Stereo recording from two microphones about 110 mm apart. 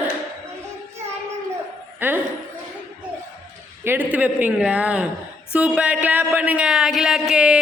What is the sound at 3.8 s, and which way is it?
Speech, 20° right (ahead or behind).